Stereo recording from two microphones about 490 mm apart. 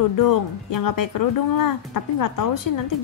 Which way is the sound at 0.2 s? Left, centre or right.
Left.